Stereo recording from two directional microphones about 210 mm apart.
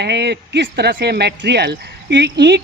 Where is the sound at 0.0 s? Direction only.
55° right (ahead or behind).